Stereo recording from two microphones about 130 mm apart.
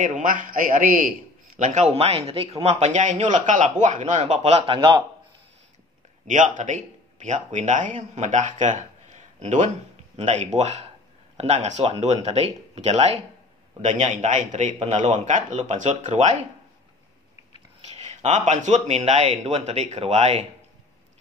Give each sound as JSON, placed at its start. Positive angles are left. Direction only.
{"t": 0.0, "sound": "a man's voice", "side_deg": -85}
{"t": 1.6, "sound": "speech", "side_deg": -65}
{"t": 6.2, "sound": "speech", "side_deg": -70}
{"t": 17.9, "sound": "speech", "side_deg": -60}